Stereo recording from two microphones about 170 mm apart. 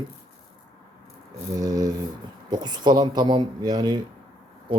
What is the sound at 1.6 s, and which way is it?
Speech, 20° right (ahead or behind).